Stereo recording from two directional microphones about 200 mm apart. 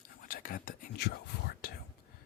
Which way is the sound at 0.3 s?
45° left (ahead or behind).